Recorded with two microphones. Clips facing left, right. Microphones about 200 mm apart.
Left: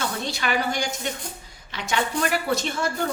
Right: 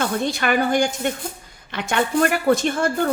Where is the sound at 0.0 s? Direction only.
55° right (ahead or behind).